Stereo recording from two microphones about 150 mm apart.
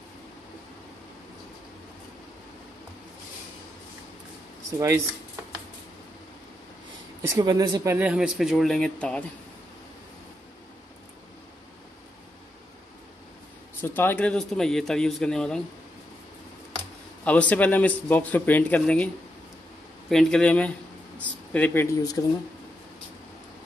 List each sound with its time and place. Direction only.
4.6 s speech: 20° right (ahead or behind)
7.2 s speech: 20° right (ahead or behind)
7.9 s speech: 10° right (ahead or behind)
13.7 s speech: 15° left (ahead or behind)
17.2 s a man's voice: 10° left (ahead or behind)
20.1 s speech: 5° left (ahead or behind)
21.9 s speech: 25° left (ahead or behind)